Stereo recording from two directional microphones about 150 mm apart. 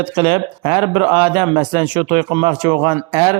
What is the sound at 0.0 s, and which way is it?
Speech, 35° right (ahead or behind).